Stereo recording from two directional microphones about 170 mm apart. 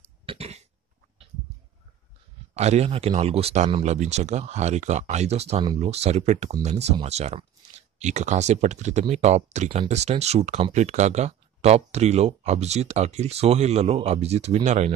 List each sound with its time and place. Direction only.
0.3 s cough: 40° right (ahead or behind)
2.5 s speech: 40° right (ahead or behind)